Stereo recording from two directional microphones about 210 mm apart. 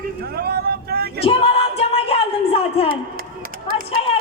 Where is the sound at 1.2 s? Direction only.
25° left (ahead or behind).